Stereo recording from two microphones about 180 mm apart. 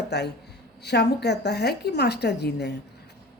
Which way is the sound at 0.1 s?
70° left (ahead or behind).